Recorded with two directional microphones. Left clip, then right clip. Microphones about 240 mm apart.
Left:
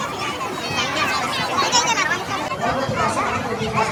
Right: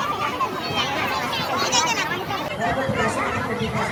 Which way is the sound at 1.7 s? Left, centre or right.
Left.